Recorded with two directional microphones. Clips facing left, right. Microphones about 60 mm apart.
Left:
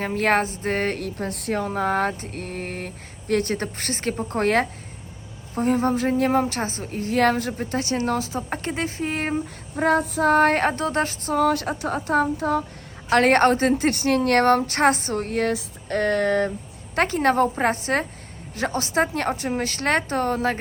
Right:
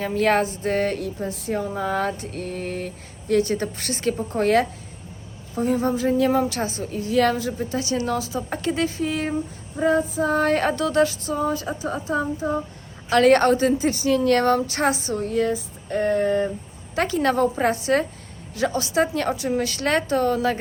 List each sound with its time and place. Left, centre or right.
0.0 s a woman's voice: left
11.3 s speech: left
13.1 s speech: left
16.9 s a woman's voice: left